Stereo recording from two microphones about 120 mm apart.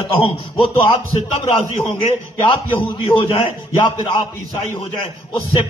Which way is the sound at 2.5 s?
45° left (ahead or behind).